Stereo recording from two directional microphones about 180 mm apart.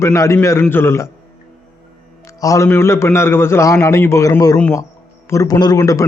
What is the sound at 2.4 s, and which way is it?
A man's voice, 15° left (ahead or behind).